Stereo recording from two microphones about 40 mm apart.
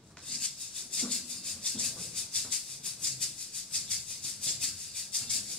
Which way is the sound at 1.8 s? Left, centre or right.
Centre.